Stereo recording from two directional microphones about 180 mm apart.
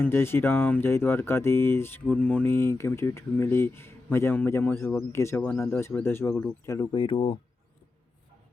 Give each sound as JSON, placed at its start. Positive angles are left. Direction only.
{"t": 0.0, "sound": "speech", "side_deg": 15}